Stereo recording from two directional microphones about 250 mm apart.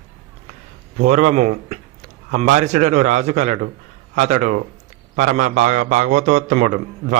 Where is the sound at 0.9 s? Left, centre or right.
Right.